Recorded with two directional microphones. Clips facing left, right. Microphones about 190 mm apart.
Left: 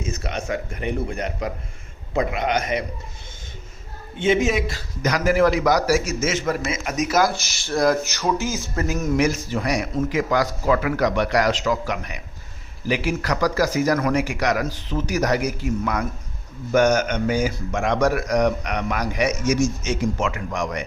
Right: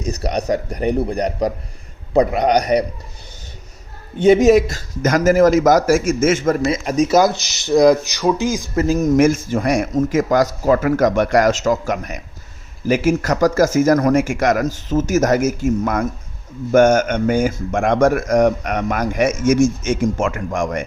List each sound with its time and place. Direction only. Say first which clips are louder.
0.0 s a man's voice: right 7 dB; 35° right (ahead or behind)
4.2 s speech: right 9 dB; 40° right (ahead or behind)
6.7 s speech: right 8 dB; 30° right (ahead or behind)
8.9 s speech: right 7 dB; 35° right (ahead or behind)